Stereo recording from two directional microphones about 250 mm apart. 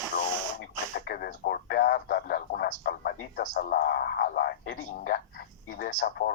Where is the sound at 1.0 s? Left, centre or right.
Left.